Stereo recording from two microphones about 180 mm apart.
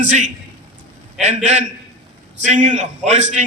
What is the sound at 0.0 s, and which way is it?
Speech, 45° right (ahead or behind).